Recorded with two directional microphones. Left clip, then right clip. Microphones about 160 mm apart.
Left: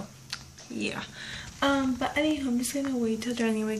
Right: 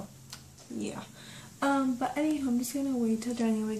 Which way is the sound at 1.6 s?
10° right (ahead or behind).